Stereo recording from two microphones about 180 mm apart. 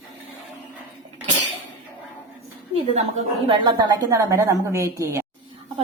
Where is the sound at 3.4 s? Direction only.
25° right (ahead or behind).